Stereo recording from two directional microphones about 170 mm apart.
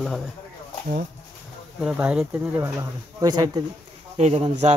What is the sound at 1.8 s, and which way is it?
Speech, 5° right (ahead or behind).